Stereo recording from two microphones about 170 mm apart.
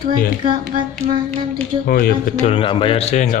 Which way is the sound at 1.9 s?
60° left (ahead or behind).